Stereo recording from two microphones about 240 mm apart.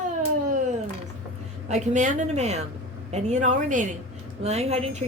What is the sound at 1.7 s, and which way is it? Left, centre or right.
A woman's voice, right.